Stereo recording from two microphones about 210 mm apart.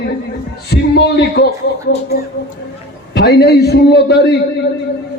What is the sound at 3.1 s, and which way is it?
A man's voice, 50° left (ahead or behind).